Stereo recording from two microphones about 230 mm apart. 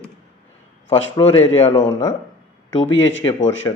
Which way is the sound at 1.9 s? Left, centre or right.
Centre.